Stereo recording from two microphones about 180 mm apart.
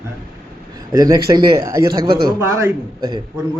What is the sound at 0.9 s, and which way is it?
Speech, 20° right (ahead or behind).